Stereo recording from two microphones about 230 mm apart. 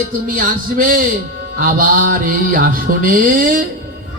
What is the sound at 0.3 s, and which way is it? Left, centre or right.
Speech, right.